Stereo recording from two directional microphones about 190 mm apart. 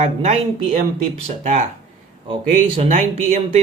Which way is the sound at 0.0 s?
35° right (ahead or behind).